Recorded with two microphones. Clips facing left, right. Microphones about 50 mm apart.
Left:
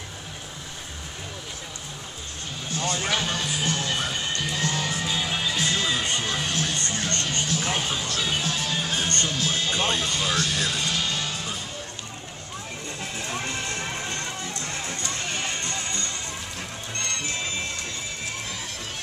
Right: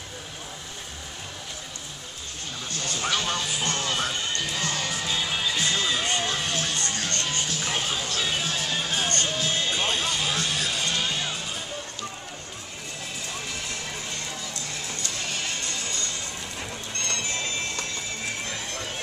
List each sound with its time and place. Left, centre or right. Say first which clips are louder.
2.8 s music: left 2 dB; centre
7.5 s music: left 2 dB; centre
9.2 s speech: even; centre
13.3 s music: left 5 dB; left
15.6 s music: left 2 dB; left